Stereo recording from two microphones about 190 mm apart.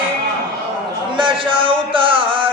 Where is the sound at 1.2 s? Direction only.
25° right (ahead or behind).